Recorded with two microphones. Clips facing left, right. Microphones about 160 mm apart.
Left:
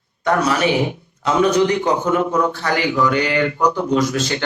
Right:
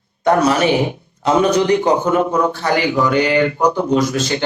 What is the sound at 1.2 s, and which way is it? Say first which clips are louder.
A man's voice: right 1 dB; 30° right (ahead or behind).